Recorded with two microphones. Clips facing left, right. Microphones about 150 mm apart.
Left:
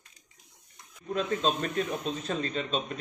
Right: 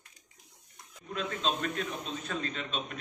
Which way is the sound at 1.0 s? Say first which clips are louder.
Left 5 dB; 40° left (ahead or behind).